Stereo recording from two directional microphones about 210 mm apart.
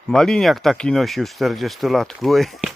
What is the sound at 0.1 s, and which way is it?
Speech, centre (ahead or behind).